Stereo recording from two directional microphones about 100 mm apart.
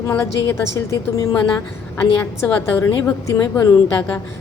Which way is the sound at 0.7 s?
30° left (ahead or behind).